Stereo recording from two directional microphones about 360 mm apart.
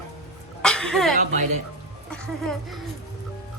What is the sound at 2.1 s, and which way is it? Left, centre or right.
Speech, centre.